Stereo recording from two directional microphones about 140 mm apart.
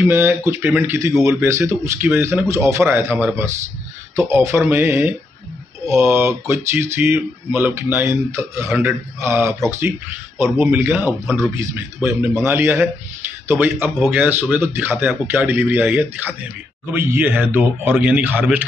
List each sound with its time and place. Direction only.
0.0 s speech: 15° right (ahead or behind)